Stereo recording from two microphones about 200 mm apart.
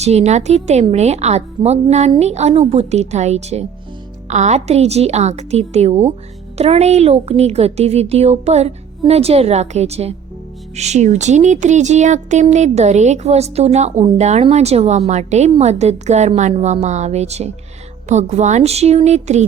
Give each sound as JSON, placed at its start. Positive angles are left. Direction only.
{"t": 0.0, "sound": "speech", "side_deg": -35}